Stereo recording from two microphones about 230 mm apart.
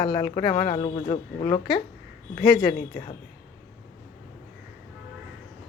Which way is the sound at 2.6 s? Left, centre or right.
Left.